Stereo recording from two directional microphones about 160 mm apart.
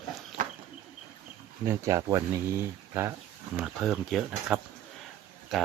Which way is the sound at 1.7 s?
20° right (ahead or behind).